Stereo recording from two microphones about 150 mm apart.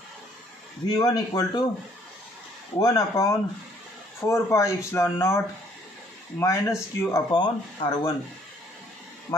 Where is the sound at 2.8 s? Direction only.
25° left (ahead or behind).